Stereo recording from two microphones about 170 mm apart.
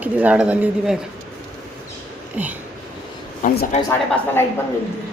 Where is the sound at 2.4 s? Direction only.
10° right (ahead or behind).